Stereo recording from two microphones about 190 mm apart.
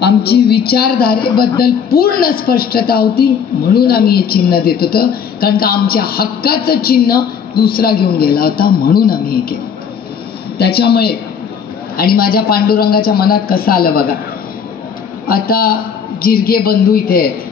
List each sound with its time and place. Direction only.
0.0 s a woman's voice: 55° left (ahead or behind)
10.6 s a woman's voice: 55° left (ahead or behind)
15.2 s a woman's voice: 50° left (ahead or behind)